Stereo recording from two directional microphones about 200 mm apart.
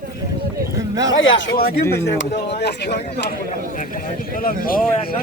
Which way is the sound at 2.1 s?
55° left (ahead or behind).